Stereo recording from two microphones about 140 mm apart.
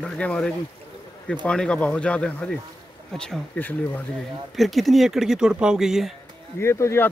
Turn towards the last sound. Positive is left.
turn(degrees=20)  # may be behind; listen again after turning